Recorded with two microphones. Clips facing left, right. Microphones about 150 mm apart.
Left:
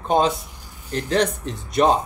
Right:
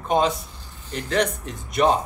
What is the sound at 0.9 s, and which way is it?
Speech, 35° left (ahead or behind).